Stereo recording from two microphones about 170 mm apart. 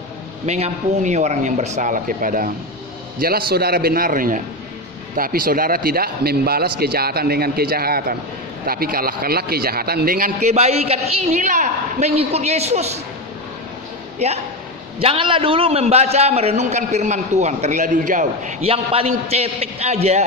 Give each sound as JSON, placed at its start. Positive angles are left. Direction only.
{"t": 0.5, "sound": "a man's voice", "side_deg": -40}
{"t": 10.4, "sound": "a man's voice", "side_deg": -40}
{"t": 14.2, "sound": "a man's voice", "side_deg": -40}